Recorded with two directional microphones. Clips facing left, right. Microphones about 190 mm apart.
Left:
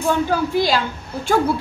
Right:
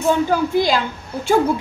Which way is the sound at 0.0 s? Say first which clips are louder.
Right 2 dB; 15° right (ahead or behind).